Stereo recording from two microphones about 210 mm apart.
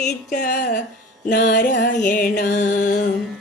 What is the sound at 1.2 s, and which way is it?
Music, 40° left (ahead or behind).